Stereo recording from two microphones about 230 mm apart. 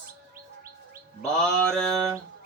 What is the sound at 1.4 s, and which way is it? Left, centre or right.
Speech, centre.